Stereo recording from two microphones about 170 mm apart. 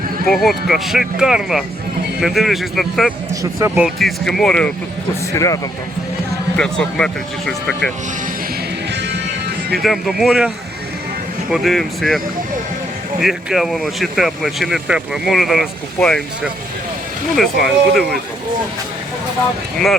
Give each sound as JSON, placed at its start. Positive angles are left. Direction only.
{"t": 0.3, "sound": "speech", "side_deg": 0}
{"t": 5.3, "sound": "speech", "side_deg": 20}
{"t": 6.6, "sound": "speech", "side_deg": 5}
{"t": 8.9, "sound": "music", "side_deg": -90}
{"t": 9.7, "sound": "speech", "side_deg": 0}
{"t": 11.5, "sound": "speech", "side_deg": 0}
{"t": 13.2, "sound": "speech", "side_deg": 0}